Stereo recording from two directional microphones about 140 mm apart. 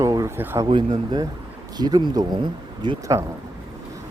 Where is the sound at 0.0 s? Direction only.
25° right (ahead or behind).